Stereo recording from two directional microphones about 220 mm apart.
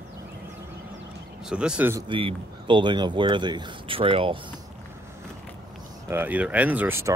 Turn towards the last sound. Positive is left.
turn(degrees=-10)  # may be behind; listen again after turning